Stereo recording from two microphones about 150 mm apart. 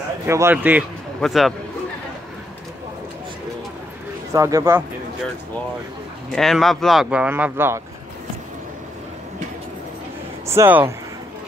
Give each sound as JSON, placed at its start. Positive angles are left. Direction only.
{"t": 0.3, "sound": "a man's voice", "side_deg": -15}
{"t": 1.2, "sound": "speech", "side_deg": 0}
{"t": 4.3, "sound": "speech", "side_deg": -20}
{"t": 6.3, "sound": "speech", "side_deg": 0}
{"t": 10.4, "sound": "speech", "side_deg": -20}